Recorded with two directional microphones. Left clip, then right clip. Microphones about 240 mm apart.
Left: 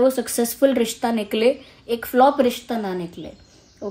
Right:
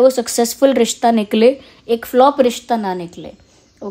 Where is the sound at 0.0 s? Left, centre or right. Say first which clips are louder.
Right 6 dB; right.